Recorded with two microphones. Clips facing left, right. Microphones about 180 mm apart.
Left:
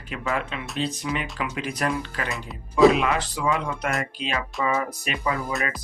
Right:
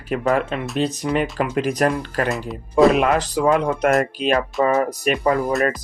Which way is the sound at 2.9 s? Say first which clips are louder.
Right 6 dB; 50° right (ahead or behind).